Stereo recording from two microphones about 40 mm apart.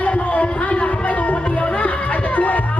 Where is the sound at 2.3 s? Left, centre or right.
Left.